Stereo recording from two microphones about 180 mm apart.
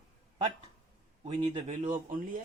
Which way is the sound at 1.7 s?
40° right (ahead or behind).